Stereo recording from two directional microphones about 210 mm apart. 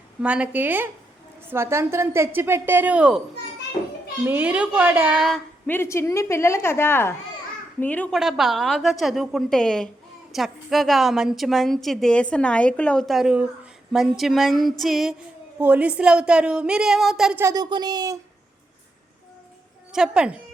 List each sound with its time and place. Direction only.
0.2 s a woman's voice: 5° right (ahead or behind)
4.3 s a woman's voice: 5° right (ahead or behind)
17.4 s speech: 20° right (ahead or behind)
19.9 s a woman's voice: 5° right (ahead or behind)